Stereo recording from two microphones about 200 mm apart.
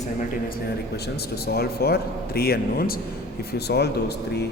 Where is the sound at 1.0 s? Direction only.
55° left (ahead or behind).